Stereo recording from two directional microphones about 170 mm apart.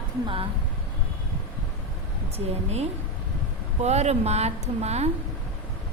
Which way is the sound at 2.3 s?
40° right (ahead or behind).